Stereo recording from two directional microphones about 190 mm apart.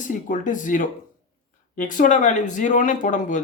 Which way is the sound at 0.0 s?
45° left (ahead or behind).